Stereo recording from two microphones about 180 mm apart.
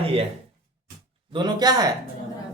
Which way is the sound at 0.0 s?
35° right (ahead or behind).